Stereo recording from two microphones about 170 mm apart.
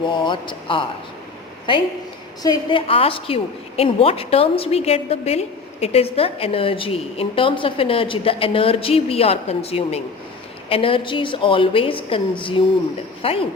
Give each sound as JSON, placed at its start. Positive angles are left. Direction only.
{"t": 0.0, "sound": "speech", "side_deg": 30}
{"t": 2.4, "sound": "a woman's voice", "side_deg": 25}